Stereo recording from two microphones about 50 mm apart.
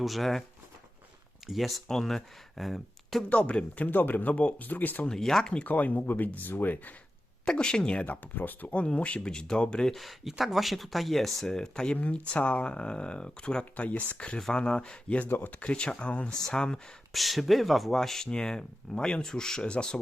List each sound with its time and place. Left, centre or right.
0.0 s speech: centre
1.5 s speech: centre
3.2 s speech: left
3.8 s speech: left
4.6 s speech: left
5.0 s speech: centre
5.6 s speech: left
7.4 s speech: centre
8.0 s speech: left
8.7 s speech: left
9.9 s speech: centre
11.9 s speech: left
16.3 s speech: centre
17.1 s speech: centre